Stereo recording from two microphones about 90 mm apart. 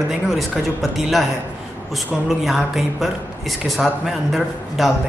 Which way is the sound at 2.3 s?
Centre (ahead or behind).